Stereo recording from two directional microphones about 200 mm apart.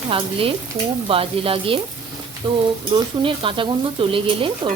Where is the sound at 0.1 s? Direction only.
25° right (ahead or behind).